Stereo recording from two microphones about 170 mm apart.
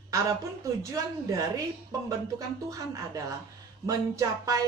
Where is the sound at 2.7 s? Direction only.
20° right (ahead or behind).